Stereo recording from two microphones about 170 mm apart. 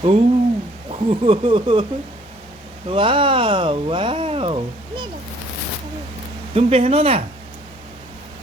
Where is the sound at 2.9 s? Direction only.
30° right (ahead or behind).